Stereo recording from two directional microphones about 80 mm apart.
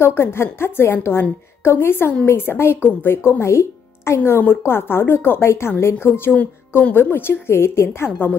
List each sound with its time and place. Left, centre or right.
0.0 s speech: left